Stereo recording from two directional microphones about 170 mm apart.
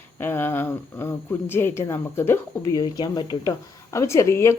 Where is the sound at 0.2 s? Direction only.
10° left (ahead or behind).